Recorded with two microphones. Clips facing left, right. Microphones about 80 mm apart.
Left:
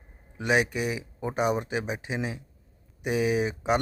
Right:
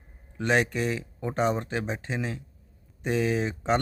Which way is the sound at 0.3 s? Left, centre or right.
Centre.